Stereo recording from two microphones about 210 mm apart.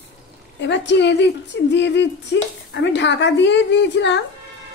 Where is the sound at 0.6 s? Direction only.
55° left (ahead or behind).